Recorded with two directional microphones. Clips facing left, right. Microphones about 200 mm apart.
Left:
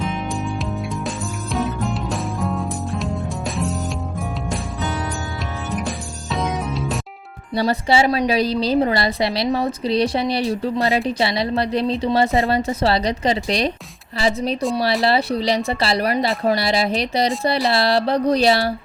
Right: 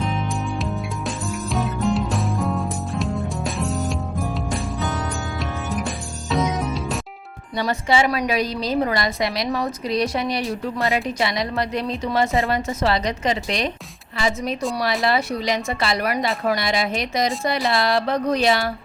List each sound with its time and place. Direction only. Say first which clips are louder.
1.5 s music: right 1 dB; centre (ahead or behind)
6.3 s music: right 1 dB; centre (ahead or behind)
7.5 s a woman's voice: left 3 dB; 35° left (ahead or behind)